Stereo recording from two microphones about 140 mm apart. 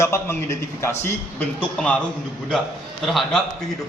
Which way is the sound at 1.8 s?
5° left (ahead or behind).